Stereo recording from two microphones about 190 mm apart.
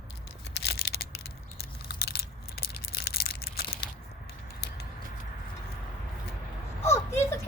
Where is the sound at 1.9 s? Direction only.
55° left (ahead or behind).